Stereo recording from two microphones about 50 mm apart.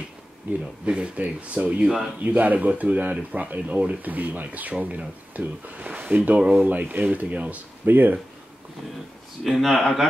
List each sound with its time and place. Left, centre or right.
0.5 s speech: right
0.8 s speech: right
5.9 s speech: right
7.8 s speech: right
9.4 s speech: centre